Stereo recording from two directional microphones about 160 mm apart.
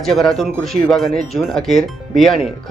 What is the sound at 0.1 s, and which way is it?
Speech, centre (ahead or behind).